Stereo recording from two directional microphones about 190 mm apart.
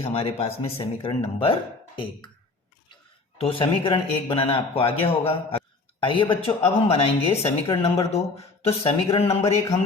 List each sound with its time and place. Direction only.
0.0 s speech: 30° left (ahead or behind)
3.4 s a man's voice: 30° left (ahead or behind)